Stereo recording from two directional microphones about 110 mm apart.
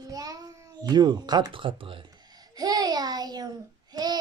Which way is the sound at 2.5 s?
35° right (ahead or behind).